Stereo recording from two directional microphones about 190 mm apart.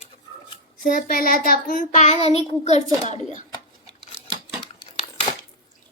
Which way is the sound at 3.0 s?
40° left (ahead or behind).